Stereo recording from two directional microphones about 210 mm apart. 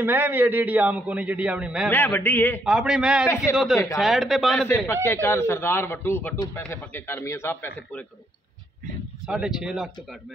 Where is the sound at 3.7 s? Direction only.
15° left (ahead or behind).